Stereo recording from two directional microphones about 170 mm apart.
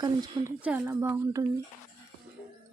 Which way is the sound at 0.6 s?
10° right (ahead or behind).